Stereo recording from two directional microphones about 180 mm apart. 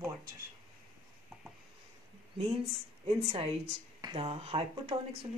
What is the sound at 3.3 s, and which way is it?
Speech, 35° right (ahead or behind).